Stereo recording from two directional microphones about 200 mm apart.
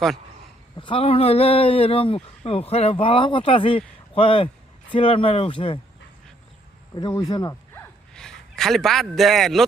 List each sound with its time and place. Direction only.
0.8 s speech: 25° left (ahead or behind)
6.9 s speech: 20° left (ahead or behind)
8.1 s a man's voice: 5° left (ahead or behind)